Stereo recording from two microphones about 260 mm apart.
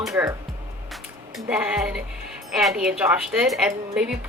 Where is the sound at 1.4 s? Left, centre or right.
Centre.